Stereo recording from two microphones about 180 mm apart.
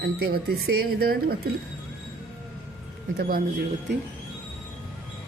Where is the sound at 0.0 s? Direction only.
60° right (ahead or behind).